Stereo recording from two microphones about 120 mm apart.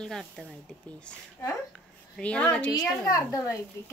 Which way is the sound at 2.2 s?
10° left (ahead or behind).